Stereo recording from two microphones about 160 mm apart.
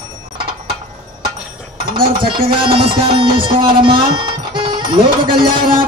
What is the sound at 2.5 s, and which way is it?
Speech, 35° right (ahead or behind).